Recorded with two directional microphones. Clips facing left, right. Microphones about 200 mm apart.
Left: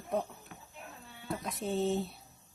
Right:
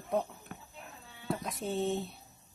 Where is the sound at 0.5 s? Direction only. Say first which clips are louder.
Right 4 dB; 55° right (ahead or behind).